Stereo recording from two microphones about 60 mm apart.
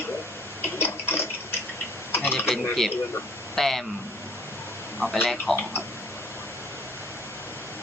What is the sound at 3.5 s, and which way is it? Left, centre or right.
Speech, centre.